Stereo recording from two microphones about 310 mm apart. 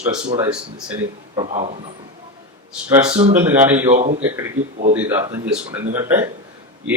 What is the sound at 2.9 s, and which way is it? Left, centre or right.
A man's voice, centre.